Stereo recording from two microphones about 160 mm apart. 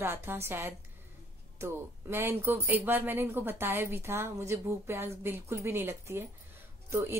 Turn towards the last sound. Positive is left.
turn(degrees=-15)  # may be behind; listen again after turning